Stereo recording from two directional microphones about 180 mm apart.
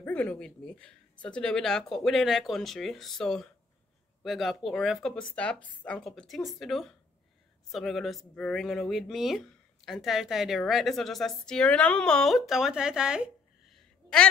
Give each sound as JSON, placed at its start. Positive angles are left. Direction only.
{"t": 0.0, "sound": "speech", "side_deg": 5}